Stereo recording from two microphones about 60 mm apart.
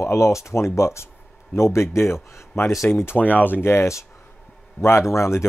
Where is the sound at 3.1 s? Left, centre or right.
Left.